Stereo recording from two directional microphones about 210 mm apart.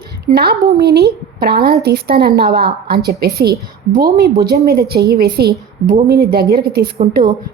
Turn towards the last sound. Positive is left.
turn(degrees=-45)  # may be behind; listen again after turning